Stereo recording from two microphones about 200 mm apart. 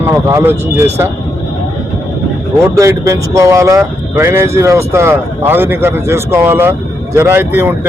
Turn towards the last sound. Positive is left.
turn(degrees=-10)  # may be behind; listen again after turning